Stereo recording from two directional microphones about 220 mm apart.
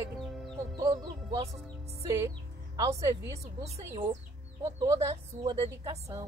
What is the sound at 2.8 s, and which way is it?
Speech, 15° right (ahead or behind).